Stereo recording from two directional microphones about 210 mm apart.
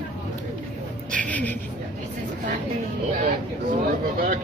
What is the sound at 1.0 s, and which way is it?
Speech, 5° left (ahead or behind).